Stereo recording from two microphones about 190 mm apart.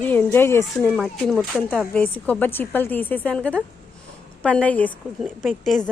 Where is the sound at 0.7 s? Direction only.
Centre (ahead or behind).